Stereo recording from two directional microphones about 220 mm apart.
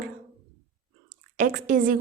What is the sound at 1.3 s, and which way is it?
Speech, 35° right (ahead or behind).